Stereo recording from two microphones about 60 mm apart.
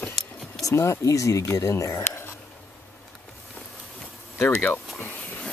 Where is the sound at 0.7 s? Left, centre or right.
Left.